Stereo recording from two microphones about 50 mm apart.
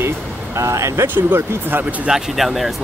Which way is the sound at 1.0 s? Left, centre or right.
Right.